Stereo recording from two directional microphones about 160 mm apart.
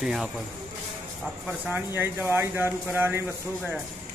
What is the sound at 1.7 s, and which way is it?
Speech, 10° right (ahead or behind).